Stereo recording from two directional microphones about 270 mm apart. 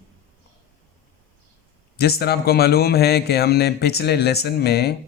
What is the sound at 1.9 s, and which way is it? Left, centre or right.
Speech, left.